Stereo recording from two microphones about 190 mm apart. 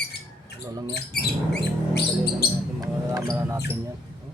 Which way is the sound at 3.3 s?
15° right (ahead or behind).